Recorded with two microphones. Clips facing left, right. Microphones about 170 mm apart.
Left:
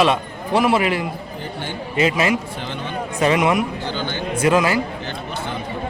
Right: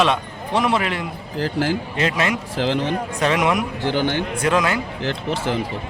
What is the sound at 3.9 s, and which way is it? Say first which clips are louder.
Speech: right 5 dB; 80° right.